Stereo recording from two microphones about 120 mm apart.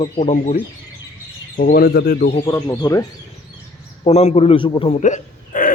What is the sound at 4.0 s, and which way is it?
Speech, 60° left (ahead or behind).